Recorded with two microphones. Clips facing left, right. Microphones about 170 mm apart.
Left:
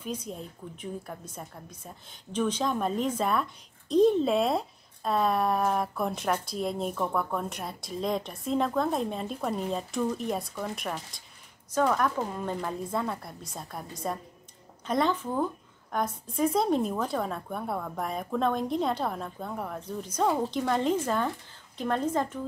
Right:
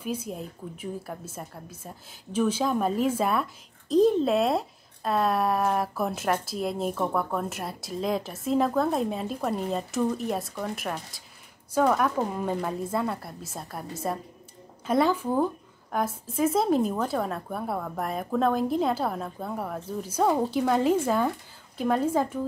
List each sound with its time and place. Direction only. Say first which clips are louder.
0.0 s a woman's voice: right 3 dB; 10° right (ahead or behind)